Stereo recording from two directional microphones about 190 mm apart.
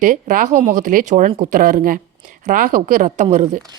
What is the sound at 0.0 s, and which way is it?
A woman's voice, 40° right (ahead or behind).